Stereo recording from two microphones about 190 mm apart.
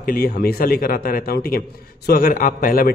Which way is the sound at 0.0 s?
50° left (ahead or behind).